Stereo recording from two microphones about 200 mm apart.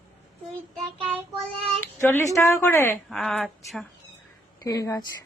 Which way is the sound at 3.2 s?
Centre (ahead or behind).